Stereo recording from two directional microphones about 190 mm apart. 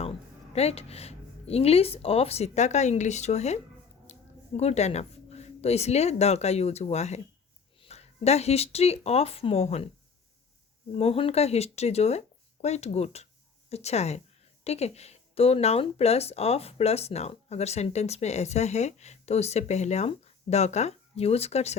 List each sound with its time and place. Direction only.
0.0 s speech: 30° left (ahead or behind)
10.9 s speech: 30° left (ahead or behind)